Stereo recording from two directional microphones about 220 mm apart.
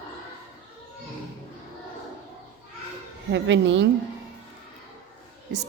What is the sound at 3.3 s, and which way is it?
Speech, 55° right (ahead or behind).